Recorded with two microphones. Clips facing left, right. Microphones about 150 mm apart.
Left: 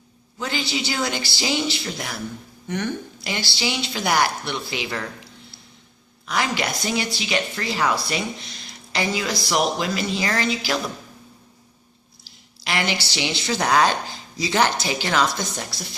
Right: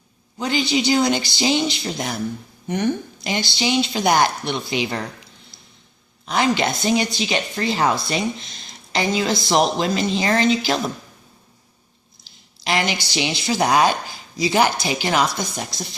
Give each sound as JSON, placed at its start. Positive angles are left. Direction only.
{"t": 0.3, "sound": "a woman's voice", "side_deg": -20}
{"t": 6.2, "sound": "a woman's voice", "side_deg": -25}
{"t": 12.6, "sound": "speech", "side_deg": -20}